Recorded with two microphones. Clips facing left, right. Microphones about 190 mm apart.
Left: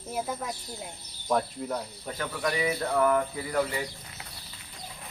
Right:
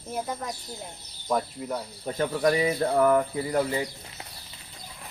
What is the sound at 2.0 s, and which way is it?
Speech, 30° right (ahead or behind).